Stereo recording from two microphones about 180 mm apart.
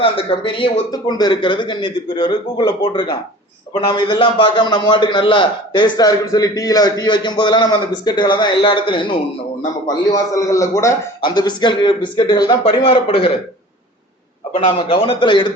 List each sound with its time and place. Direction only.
0.0 s a man's voice: 30° left (ahead or behind)
14.5 s a man's voice: 30° left (ahead or behind)